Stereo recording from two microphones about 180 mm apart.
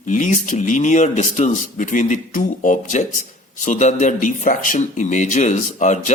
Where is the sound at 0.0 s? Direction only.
45° left (ahead or behind).